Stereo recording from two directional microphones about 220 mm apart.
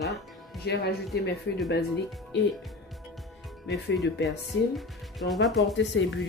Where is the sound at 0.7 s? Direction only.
50° left (ahead or behind).